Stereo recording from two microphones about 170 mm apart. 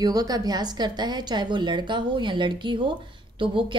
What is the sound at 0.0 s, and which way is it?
A woman's voice, 20° right (ahead or behind).